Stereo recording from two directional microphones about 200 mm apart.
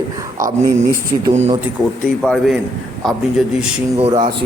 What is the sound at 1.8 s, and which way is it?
Speech, 20° right (ahead or behind).